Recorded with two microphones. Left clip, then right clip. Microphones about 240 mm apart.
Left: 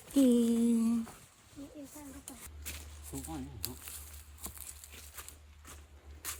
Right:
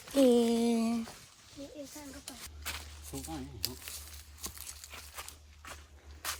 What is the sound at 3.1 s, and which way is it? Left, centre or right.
Speech, left.